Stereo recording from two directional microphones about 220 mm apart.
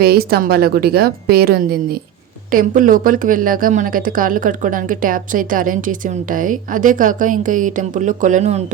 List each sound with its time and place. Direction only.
0.0 s a woman's voice: 45° right (ahead or behind)